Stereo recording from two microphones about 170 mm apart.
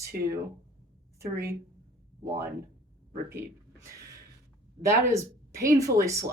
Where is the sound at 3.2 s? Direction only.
15° right (ahead or behind).